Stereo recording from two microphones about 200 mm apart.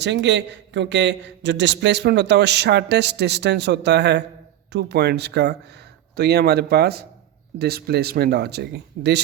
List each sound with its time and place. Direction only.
0.0 s a man's voice: 60° right (ahead or behind)